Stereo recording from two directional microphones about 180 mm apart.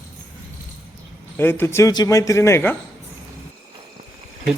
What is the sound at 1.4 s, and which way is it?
Speech, 10° left (ahead or behind).